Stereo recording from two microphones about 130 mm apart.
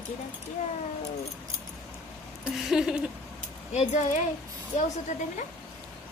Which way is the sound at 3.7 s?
60° left (ahead or behind).